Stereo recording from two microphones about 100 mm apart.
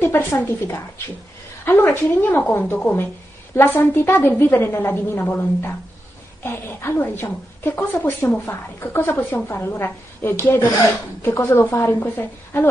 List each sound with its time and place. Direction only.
0.0 s a woman's voice: 25° left (ahead or behind)